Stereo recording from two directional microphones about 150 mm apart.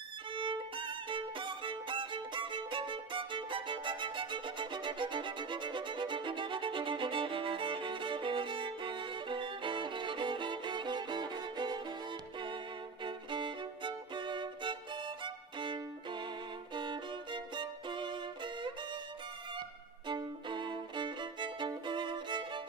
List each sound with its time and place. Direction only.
0.3 s violin: 35° right (ahead or behind)
13.0 s violin: 30° right (ahead or behind)
20.1 s violin: 30° right (ahead or behind)